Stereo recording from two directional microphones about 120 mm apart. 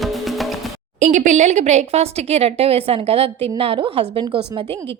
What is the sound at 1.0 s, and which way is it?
A woman's voice, 70° right (ahead or behind).